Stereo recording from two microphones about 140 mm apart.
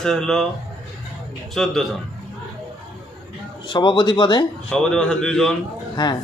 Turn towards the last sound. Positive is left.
turn(degrees=30)  # may be behind; listen again after turning